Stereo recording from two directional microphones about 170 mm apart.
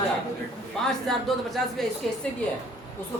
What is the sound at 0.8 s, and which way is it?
Speech, centre (ahead or behind).